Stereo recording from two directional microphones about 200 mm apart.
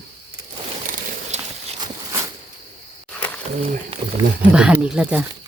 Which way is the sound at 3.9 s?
25° right (ahead or behind).